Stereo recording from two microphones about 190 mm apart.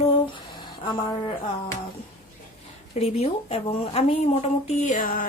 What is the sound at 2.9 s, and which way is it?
Speech, 35° left (ahead or behind).